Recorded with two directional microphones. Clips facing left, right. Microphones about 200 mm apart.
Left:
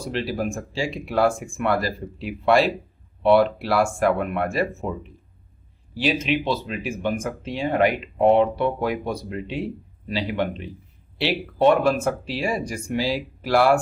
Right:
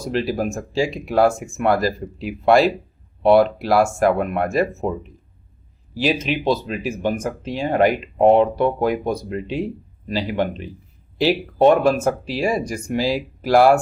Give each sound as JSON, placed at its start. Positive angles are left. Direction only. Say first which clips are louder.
{"t": 0.0, "sound": "speech", "louder": "right 4 dB", "side_deg": -40}
{"t": 6.0, "sound": "speech", "louder": "right 2 dB", "side_deg": -40}